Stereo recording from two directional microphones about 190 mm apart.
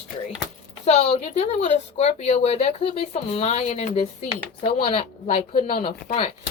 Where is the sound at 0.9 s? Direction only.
35° left (ahead or behind).